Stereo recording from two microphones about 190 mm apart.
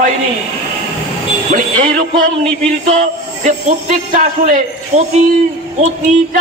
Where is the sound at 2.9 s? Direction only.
40° right (ahead or behind).